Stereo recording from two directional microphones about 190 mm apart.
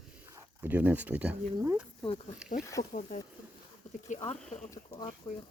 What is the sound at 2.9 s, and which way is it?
Speech, 40° left (ahead or behind).